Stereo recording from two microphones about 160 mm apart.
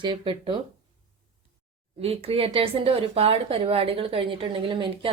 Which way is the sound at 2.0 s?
40° right (ahead or behind).